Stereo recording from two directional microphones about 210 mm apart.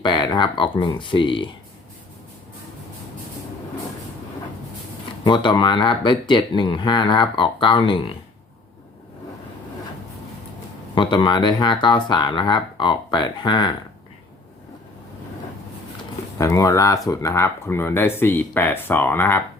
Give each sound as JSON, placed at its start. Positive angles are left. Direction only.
{"t": 0.0, "sound": "speech", "side_deg": 20}
{"t": 5.2, "sound": "speech", "side_deg": 20}
{"t": 10.9, "sound": "speech", "side_deg": 20}
{"t": 16.4, "sound": "speech", "side_deg": 15}